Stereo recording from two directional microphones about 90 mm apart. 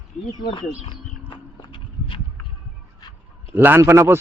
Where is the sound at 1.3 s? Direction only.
65° left (ahead or behind).